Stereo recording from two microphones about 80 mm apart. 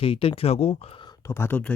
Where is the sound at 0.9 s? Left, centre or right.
Left.